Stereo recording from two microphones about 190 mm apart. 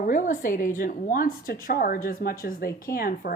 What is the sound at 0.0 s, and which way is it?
A woman's voice, 45° left (ahead or behind).